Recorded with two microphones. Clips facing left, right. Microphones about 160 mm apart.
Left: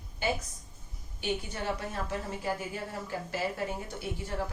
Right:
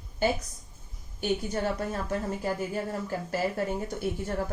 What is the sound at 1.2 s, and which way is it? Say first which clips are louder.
Speech: right 6 dB; 45° right (ahead or behind).